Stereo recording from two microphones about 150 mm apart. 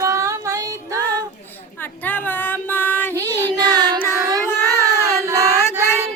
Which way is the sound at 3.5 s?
25° right (ahead or behind).